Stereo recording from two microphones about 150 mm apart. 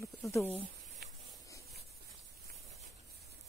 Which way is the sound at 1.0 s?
90° right.